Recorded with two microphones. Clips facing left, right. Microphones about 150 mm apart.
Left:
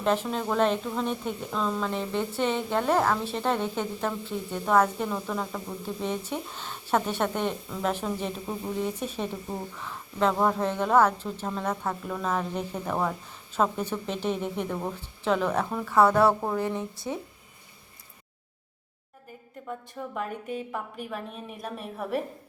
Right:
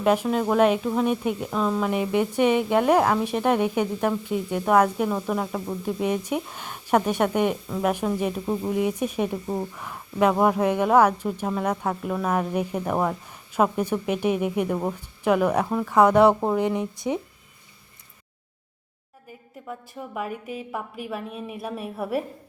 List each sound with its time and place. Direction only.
0.0 s speech: 10° right (ahead or behind)
19.6 s speech: 10° right (ahead or behind)